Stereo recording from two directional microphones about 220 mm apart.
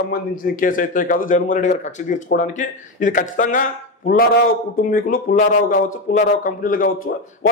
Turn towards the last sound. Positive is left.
turn(degrees=40)  # may be behind; listen again after turning